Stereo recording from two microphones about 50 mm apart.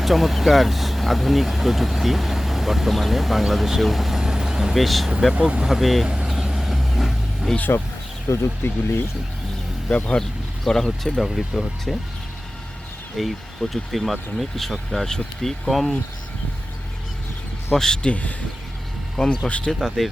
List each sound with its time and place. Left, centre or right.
0.0 s speech: centre
4.8 s speech: centre
5.3 s speech: right
5.6 s speech: centre
6.1 s vehicle: centre
8.3 s speech: left
8.6 s speech: left
10.2 s speech: centre
13.1 s speech: centre
17.7 s speech: centre
18.1 s speech: left
19.1 s speech: centre
19.5 s speech: left